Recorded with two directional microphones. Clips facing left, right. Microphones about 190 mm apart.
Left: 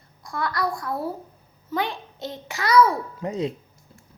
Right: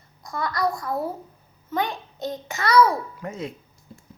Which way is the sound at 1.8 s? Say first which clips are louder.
Right 1 dB; 45° right (ahead or behind).